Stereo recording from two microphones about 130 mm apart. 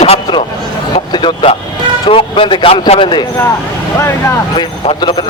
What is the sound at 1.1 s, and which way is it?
A man's voice, 35° left (ahead or behind).